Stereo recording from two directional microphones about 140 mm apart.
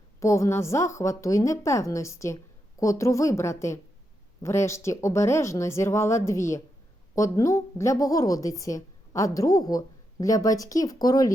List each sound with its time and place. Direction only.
0.2 s a woman's voice: 20° left (ahead or behind)